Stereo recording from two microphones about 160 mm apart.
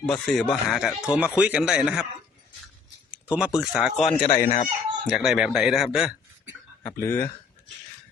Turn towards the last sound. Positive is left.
turn(degrees=15)  # may be behind; listen again after turning